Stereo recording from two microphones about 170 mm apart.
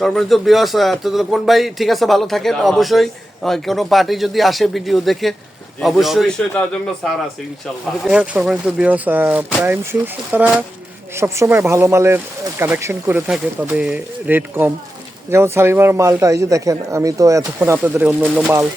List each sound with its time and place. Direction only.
0.0 s speech: centre (ahead or behind)
8.0 s speech: 5° right (ahead or behind)